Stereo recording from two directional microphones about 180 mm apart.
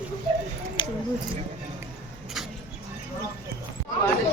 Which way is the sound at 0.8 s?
25° left (ahead or behind).